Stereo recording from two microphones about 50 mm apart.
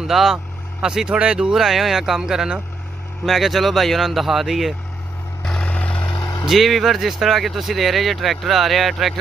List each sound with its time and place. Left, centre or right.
0.0 s speech: centre
0.8 s speech: centre
1.5 s speech: centre
3.3 s speech: centre
5.6 s vehicle: left
6.4 s speech: centre